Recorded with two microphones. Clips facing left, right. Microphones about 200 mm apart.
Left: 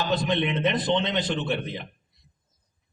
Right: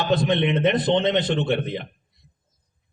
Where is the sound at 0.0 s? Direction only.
55° right (ahead or behind).